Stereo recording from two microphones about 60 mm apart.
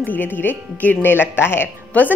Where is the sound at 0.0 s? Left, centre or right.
Left.